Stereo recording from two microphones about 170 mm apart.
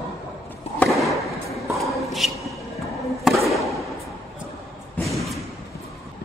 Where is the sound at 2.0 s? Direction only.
Centre (ahead or behind).